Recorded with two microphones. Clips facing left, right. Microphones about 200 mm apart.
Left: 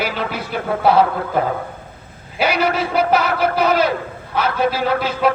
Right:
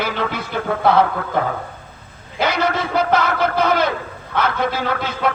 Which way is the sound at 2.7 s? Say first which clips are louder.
Left 1 dB; 10° left (ahead or behind).